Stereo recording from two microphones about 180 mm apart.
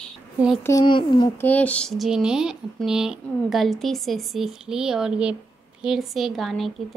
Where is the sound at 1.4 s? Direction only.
10° left (ahead or behind).